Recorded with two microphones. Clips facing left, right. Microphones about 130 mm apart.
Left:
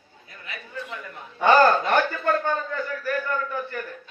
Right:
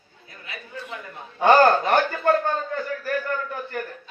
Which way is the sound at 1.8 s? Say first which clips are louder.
Right 2 dB; 35° right (ahead or behind).